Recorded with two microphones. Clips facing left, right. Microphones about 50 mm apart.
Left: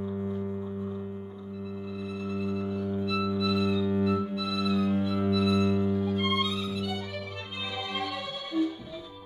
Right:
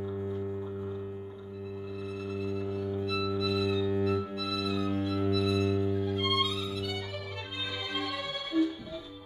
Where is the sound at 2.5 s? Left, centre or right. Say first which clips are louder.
Left 1 dB; centre.